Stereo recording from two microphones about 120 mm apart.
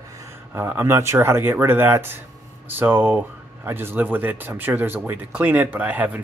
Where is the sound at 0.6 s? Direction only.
20° right (ahead or behind).